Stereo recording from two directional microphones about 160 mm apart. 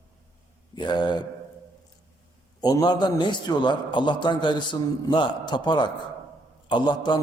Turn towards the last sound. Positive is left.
turn(degrees=30)  # may be behind; listen again after turning